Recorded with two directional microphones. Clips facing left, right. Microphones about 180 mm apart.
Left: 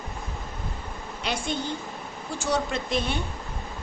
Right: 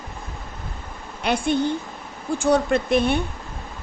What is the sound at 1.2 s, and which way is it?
A woman's voice, 60° right (ahead or behind).